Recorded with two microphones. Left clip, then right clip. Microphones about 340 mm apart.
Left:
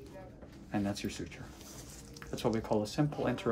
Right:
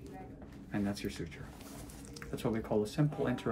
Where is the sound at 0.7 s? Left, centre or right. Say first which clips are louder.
Left 2 dB; centre.